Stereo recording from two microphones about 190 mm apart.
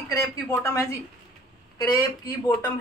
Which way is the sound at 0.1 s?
15° left (ahead or behind).